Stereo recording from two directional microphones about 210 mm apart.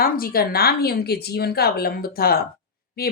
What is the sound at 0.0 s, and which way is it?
Speech, 45° left (ahead or behind).